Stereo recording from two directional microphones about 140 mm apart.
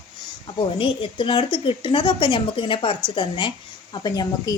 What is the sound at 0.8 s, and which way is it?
A woman's voice, 35° left (ahead or behind).